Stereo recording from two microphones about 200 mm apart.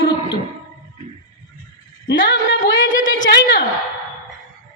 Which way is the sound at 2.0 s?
70° left (ahead or behind).